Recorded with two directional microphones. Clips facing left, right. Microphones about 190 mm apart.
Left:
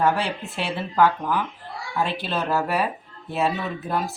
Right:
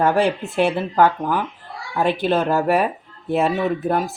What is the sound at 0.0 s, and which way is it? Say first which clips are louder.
Speech: right 5 dB; 50° right (ahead or behind).